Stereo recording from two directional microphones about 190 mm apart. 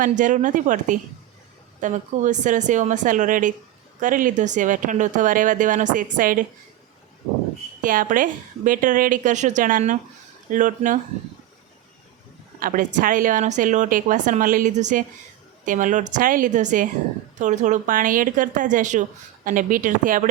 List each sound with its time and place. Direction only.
0.0 s a woman's voice: 40° right (ahead or behind)
7.8 s a woman's voice: 45° right (ahead or behind)
12.5 s a woman's voice: 45° right (ahead or behind)